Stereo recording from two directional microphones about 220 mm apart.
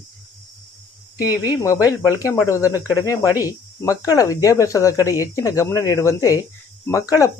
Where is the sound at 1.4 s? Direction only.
15° left (ahead or behind).